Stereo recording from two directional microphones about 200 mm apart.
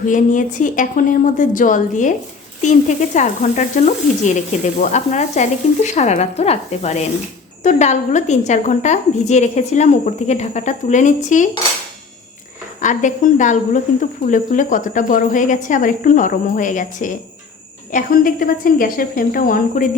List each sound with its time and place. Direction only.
0.0 s speech: 40° left (ahead or behind)
3.2 s speech: 35° left (ahead or behind)
12.8 s speech: 40° left (ahead or behind)